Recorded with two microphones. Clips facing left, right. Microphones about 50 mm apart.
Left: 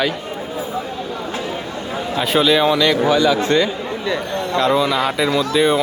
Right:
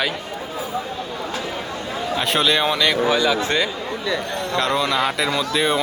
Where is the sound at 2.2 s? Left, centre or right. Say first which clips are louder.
Left 4 dB; centre.